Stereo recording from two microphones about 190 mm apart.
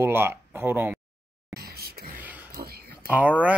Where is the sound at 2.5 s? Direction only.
55° right (ahead or behind).